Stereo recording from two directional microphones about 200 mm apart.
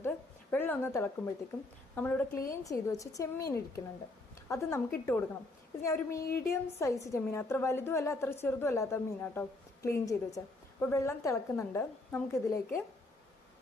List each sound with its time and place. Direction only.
0.5 s a woman's voice: 10° left (ahead or behind)
6.2 s a woman's voice: 50° left (ahead or behind)
6.5 s a woman's voice: 15° left (ahead or behind)